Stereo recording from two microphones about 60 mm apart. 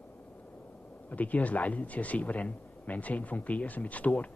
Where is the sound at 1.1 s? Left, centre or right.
Left.